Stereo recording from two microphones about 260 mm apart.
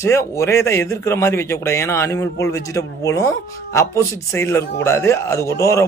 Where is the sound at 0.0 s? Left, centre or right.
Centre.